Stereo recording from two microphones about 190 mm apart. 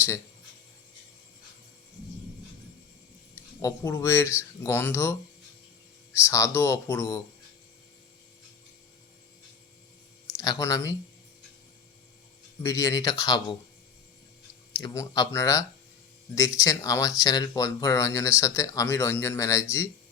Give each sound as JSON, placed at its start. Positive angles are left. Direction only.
{"t": 3.6, "sound": "speech", "side_deg": 15}
{"t": 6.1, "sound": "speech", "side_deg": 15}
{"t": 10.3, "sound": "speech", "side_deg": 20}
{"t": 12.6, "sound": "speech", "side_deg": 15}
{"t": 14.8, "sound": "speech", "side_deg": 20}